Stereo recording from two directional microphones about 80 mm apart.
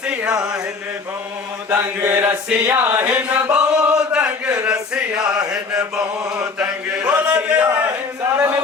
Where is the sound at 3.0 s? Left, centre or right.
Centre.